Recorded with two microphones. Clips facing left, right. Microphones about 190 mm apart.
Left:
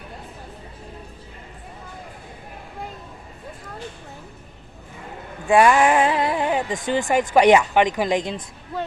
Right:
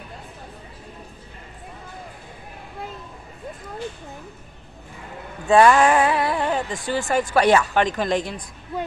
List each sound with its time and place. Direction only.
5.5 s speech: 15° left (ahead or behind)